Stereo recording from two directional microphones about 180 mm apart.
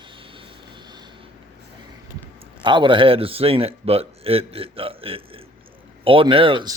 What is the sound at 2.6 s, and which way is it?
Speech, 25° right (ahead or behind).